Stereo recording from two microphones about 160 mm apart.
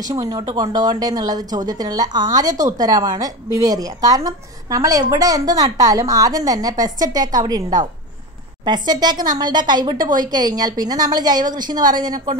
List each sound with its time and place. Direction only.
0.1 s a woman's voice: 20° right (ahead or behind)